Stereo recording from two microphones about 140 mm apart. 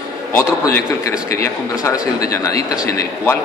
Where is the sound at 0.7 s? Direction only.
20° left (ahead or behind).